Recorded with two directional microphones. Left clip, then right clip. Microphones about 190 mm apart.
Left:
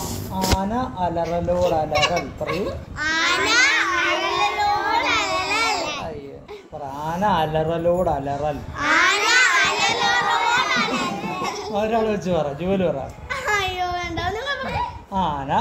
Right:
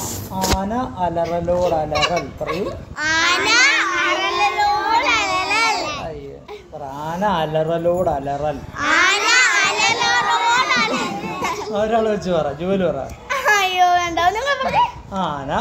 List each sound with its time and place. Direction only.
0.6 s speech: centre (ahead or behind)
1.9 s speech: 20° left (ahead or behind)
2.4 s babbling: 20° right (ahead or behind)
7.1 s speech: centre (ahead or behind)
8.8 s a sound: 30° right (ahead or behind)
11.7 s speech: centre (ahead or behind)
13.3 s children playing: 30° right (ahead or behind)
15.1 s speech: 5° left (ahead or behind)